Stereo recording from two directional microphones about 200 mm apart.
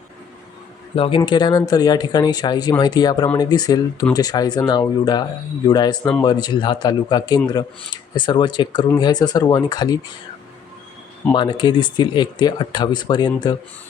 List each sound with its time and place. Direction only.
0.9 s speech: 25° left (ahead or behind)
11.3 s speech: 20° left (ahead or behind)